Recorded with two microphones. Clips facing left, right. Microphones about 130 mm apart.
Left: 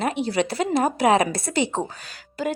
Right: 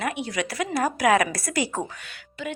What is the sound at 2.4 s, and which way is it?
Speech, 40° left (ahead or behind).